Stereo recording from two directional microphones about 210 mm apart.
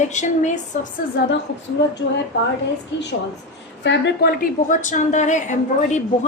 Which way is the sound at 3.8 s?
60° left (ahead or behind).